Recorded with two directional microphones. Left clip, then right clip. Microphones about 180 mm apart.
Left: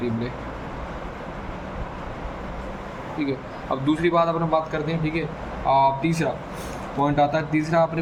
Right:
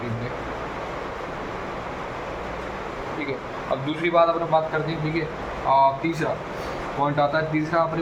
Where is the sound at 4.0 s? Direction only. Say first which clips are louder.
Right 3 dB; 50° left (ahead or behind).